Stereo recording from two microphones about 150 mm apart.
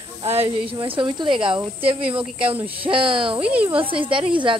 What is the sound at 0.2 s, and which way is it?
Speech, 40° right (ahead or behind).